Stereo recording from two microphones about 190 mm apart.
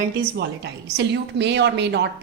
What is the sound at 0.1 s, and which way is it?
A woman's voice, 60° right (ahead or behind).